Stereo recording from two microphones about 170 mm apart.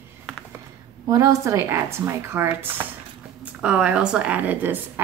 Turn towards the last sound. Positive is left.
turn(degrees=-10)  # may be behind; listen again after turning